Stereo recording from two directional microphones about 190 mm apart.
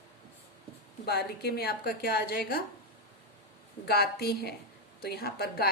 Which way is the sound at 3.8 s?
55° left (ahead or behind).